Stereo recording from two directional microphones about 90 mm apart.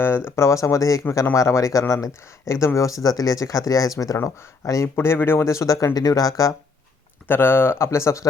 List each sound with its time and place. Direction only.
0.3 s speech: 30° left (ahead or behind)
7.3 s speech: 25° left (ahead or behind)